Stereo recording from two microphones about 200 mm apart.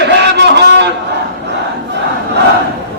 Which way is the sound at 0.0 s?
60° right (ahead or behind).